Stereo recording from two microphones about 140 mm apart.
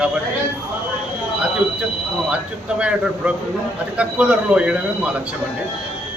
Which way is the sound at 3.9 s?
10° right (ahead or behind).